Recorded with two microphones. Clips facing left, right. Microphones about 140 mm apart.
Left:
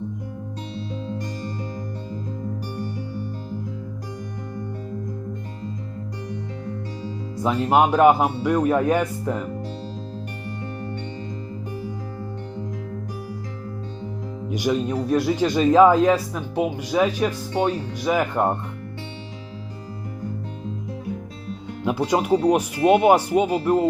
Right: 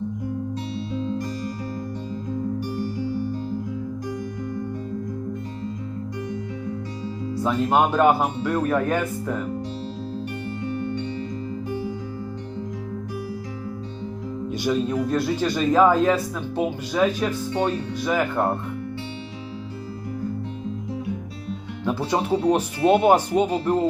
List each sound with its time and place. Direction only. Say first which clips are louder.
7.4 s speech: left 2 dB; 15° left (ahead or behind)
10.7 s music: right 8 dB; 35° left (ahead or behind)
14.5 s speech: left 1 dB; 15° left (ahead or behind)
21.8 s speech: left 3 dB; 15° left (ahead or behind)